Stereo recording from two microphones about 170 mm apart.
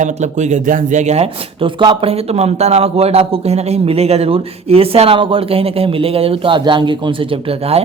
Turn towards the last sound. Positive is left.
turn(degrees=-35)  # may be behind; listen again after turning